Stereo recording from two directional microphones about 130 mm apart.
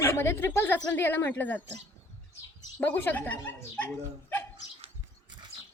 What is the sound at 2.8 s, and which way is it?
A woman's voice, 15° left (ahead or behind).